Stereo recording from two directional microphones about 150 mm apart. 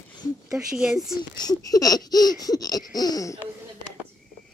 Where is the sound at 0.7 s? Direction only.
Centre (ahead or behind).